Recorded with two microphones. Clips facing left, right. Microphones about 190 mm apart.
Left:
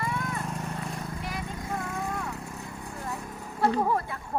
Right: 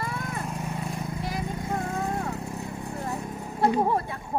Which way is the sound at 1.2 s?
35° right (ahead or behind).